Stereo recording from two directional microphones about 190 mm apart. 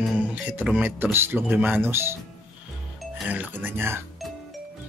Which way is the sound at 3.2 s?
10° right (ahead or behind).